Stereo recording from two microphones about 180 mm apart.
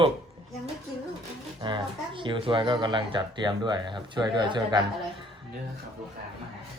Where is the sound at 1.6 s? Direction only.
25° right (ahead or behind).